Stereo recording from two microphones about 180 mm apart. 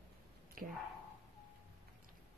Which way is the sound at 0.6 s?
50° right (ahead or behind).